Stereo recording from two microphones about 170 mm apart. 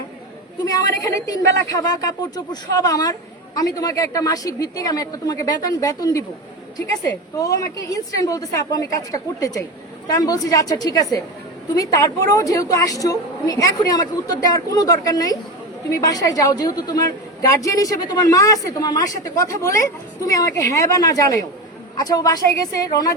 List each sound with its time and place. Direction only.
0.6 s a woman's voice: 20° left (ahead or behind)